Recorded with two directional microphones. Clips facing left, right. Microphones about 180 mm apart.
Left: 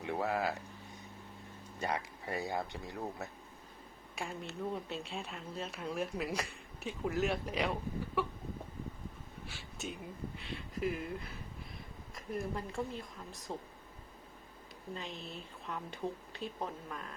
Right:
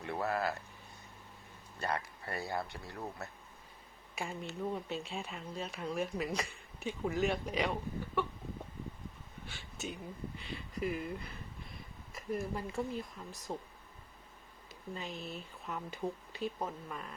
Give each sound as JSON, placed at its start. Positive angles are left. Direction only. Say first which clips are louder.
{"t": 0.0, "sound": "a sound", "louder": "left 1 dB", "side_deg": 15}
{"t": 1.8, "sound": "speech", "louder": "even", "side_deg": 15}
{"t": 4.1, "sound": "speech", "louder": "right 1 dB", "side_deg": 0}
{"t": 9.5, "sound": "speech", "louder": "right 1 dB", "side_deg": 0}
{"t": 15.6, "sound": "speech", "louder": "right 1 dB", "side_deg": 0}